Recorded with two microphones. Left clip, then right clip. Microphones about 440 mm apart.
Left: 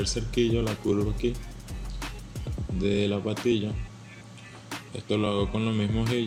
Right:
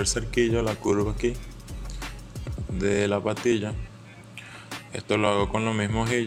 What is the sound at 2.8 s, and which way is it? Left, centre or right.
Speech, centre.